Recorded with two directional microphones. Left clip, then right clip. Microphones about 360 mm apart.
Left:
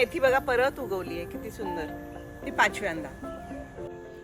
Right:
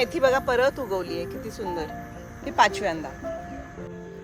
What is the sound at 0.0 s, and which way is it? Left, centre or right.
Speech, centre.